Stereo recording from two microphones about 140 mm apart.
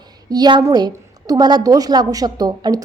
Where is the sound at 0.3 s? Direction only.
30° right (ahead or behind).